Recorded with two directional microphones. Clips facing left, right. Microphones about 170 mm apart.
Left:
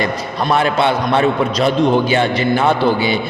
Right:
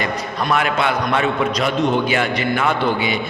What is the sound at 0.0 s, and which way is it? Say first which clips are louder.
A man's voice: left 3 dB; 30° left (ahead or behind).